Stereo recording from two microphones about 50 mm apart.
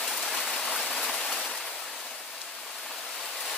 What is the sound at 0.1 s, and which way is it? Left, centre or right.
Rain, centre.